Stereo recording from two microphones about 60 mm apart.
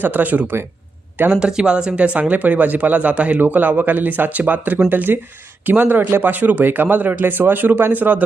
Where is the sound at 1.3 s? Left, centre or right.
Centre.